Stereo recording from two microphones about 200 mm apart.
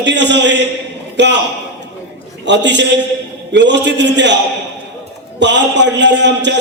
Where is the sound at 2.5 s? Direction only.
60° right (ahead or behind).